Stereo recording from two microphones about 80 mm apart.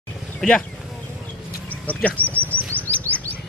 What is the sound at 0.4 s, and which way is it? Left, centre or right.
Speech, centre.